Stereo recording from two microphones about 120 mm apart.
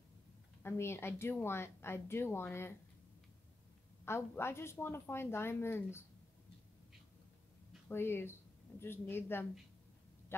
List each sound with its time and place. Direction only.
0.6 s speech: 20° left (ahead or behind)
4.0 s speech: 20° left (ahead or behind)
7.9 s speech: 20° left (ahead or behind)